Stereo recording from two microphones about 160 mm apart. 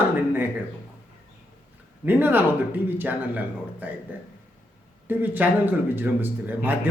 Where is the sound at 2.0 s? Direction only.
10° right (ahead or behind).